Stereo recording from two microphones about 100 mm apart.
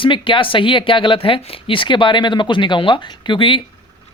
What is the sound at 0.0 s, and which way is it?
Speech, 60° left (ahead or behind).